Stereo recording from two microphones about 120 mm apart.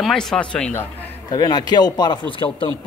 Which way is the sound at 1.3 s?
35° left (ahead or behind).